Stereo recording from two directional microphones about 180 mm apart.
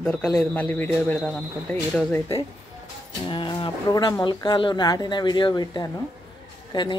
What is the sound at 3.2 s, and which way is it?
Speech, 25° left (ahead or behind).